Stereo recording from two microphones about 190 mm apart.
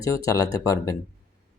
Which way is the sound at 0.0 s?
15° left (ahead or behind).